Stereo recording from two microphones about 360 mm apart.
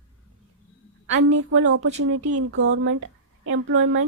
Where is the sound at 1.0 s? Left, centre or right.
Right.